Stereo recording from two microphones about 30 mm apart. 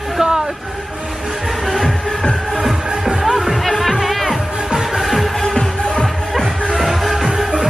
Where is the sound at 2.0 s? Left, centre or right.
Left.